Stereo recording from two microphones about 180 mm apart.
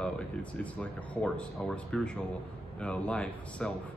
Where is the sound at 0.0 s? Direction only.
5° left (ahead or behind).